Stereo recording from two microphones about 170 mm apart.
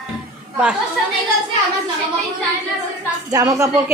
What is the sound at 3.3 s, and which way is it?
Speech, 20° right (ahead or behind).